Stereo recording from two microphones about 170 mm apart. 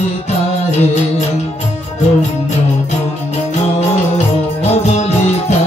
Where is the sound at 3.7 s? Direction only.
40° left (ahead or behind).